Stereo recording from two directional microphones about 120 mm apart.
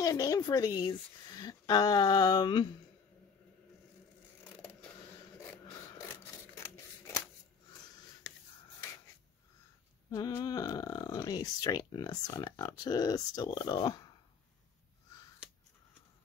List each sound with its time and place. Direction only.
0.0 s speech: 30° left (ahead or behind)
10.1 s speech: 30° left (ahead or behind)